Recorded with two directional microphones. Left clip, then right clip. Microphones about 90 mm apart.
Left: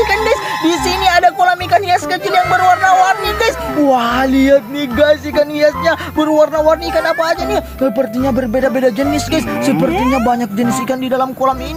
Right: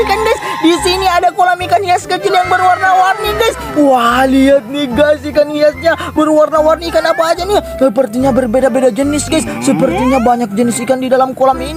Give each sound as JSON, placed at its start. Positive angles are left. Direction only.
{"t": 0.0, "sound": "speech", "side_deg": -45}
{"t": 0.7, "sound": "speech", "side_deg": -30}
{"t": 2.4, "sound": "speech", "side_deg": 0}
{"t": 3.9, "sound": "speech", "side_deg": -45}
{"t": 6.3, "sound": "speech", "side_deg": -55}
{"t": 9.7, "sound": "speech", "side_deg": 0}
{"t": 10.3, "sound": "speech", "side_deg": -40}